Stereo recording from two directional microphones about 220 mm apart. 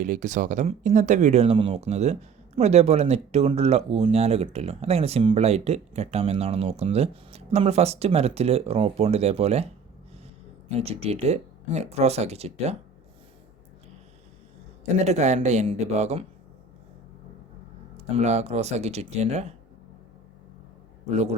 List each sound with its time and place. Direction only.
0.0 s speech: 35° right (ahead or behind)
10.7 s speech: 25° right (ahead or behind)
14.8 s speech: 30° right (ahead or behind)
17.9 s speech: 30° right (ahead or behind)
21.1 s speech: 30° right (ahead or behind)